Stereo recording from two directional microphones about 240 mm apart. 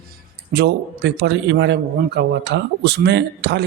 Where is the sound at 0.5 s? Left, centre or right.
Right.